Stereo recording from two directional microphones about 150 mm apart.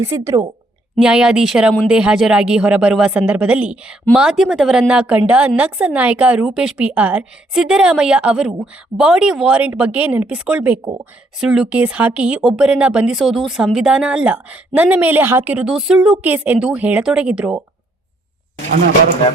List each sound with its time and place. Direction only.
0.0 s a woman's voice: 20° right (ahead or behind)
0.9 s a woman's voice: 5° right (ahead or behind)